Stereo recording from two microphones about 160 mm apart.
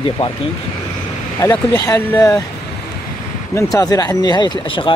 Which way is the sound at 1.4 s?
20° left (ahead or behind).